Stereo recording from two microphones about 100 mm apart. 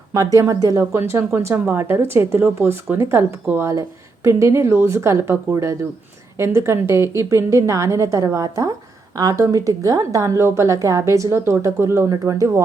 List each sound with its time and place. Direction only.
0.1 s a woman's voice: 35° right (ahead or behind)